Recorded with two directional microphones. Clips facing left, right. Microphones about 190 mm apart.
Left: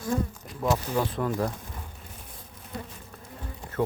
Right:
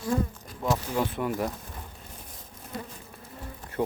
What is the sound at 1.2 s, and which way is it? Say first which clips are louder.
Speech: left 1 dB; 15° right (ahead or behind).